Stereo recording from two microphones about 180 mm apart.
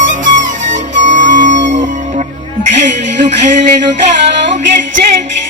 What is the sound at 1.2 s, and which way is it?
Music, 45° right (ahead or behind).